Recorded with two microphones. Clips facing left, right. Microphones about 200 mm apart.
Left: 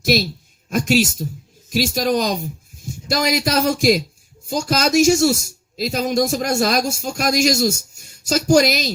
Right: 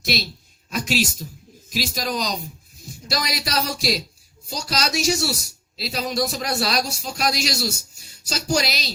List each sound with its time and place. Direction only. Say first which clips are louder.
0.0 s speech: left 8 dB; 50° left (ahead or behind)